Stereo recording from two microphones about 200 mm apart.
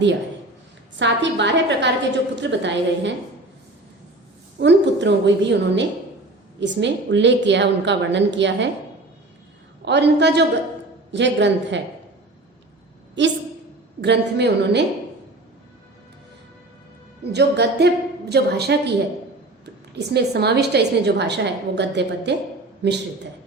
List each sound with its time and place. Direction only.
0.9 s a woman's voice: 65° right (ahead or behind)
4.6 s a woman's voice: 60° right (ahead or behind)
9.8 s a woman's voice: 60° right (ahead or behind)
13.2 s a woman's voice: 65° right (ahead or behind)
17.3 s a woman's voice: 55° right (ahead or behind)
20.0 s a woman's voice: 55° right (ahead or behind)